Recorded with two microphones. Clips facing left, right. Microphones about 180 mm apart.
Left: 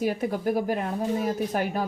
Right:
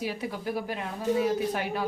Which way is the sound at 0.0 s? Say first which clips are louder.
Left 6 dB; 50° left (ahead or behind).